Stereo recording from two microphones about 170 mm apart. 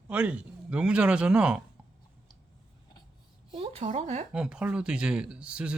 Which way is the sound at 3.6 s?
40° right (ahead or behind).